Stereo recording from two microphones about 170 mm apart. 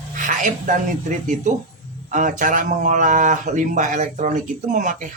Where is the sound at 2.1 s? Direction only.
50° right (ahead or behind).